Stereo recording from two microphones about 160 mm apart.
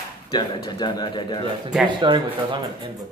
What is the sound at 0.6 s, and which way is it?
Speech, 25° left (ahead or behind).